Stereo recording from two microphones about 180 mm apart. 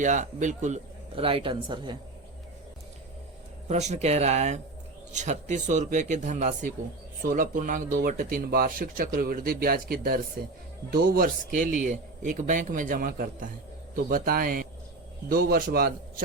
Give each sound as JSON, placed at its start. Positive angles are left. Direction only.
{"t": 0.0, "sound": "speech", "side_deg": -45}
{"t": 3.7, "sound": "a man's voice", "side_deg": -40}